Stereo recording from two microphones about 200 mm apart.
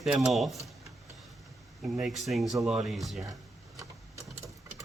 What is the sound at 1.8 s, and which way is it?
Speech, centre (ahead or behind).